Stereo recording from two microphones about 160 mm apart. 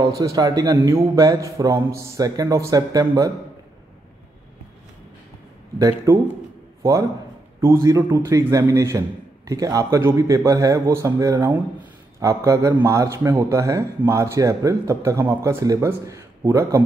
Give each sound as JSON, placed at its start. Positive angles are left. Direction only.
{"t": 0.0, "sound": "speech", "side_deg": -25}
{"t": 5.8, "sound": "a man's voice", "side_deg": -20}